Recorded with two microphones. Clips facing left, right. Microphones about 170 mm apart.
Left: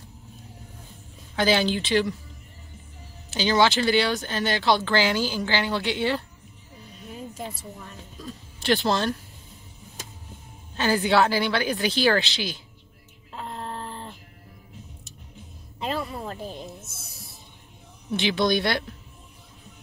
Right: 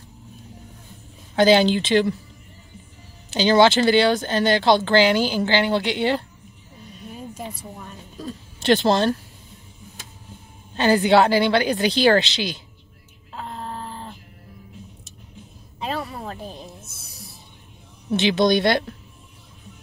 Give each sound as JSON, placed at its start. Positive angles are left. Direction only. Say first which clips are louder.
{"t": 1.3, "sound": "a woman's voice", "louder": "right 7 dB", "side_deg": -25}
{"t": 3.3, "sound": "a woman's voice", "louder": "right 6 dB", "side_deg": -25}
{"t": 8.2, "sound": "speech", "louder": "right 7 dB", "side_deg": -30}
{"t": 10.8, "sound": "a woman's voice", "louder": "right 5 dB", "side_deg": -20}
{"t": 13.4, "sound": "a sound", "louder": "right 2 dB", "side_deg": 0}
{"t": 16.4, "sound": "music", "louder": "left 1 dB", "side_deg": 0}
{"t": 18.1, "sound": "a woman's voice", "louder": "right 5 dB", "side_deg": -20}